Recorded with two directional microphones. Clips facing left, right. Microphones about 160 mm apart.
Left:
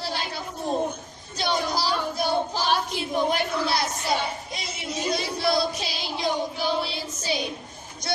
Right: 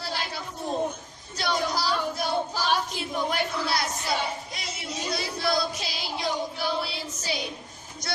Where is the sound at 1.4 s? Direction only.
20° left (ahead or behind).